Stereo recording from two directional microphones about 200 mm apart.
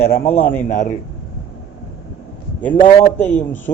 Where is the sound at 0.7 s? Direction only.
35° left (ahead or behind).